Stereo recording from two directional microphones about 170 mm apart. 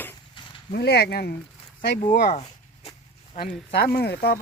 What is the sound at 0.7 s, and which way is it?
Speech, 70° left (ahead or behind).